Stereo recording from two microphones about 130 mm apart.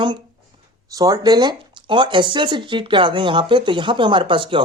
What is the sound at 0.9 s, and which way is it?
Speech, 30° right (ahead or behind).